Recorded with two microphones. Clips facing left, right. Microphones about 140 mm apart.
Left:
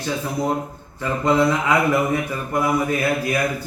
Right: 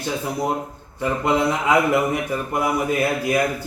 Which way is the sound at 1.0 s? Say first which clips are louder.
Left 2 dB; 15° right (ahead or behind).